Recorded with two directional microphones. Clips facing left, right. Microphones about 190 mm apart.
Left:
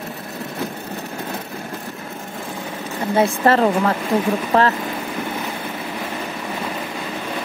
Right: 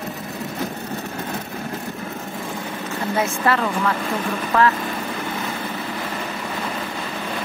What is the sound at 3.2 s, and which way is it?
Speech, 35° left (ahead or behind).